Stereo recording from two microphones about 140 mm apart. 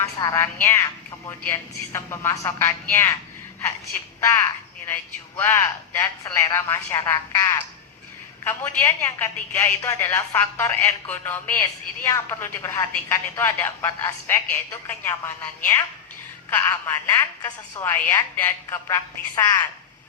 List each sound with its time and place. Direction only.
0.2 s a man's voice: 20° left (ahead or behind)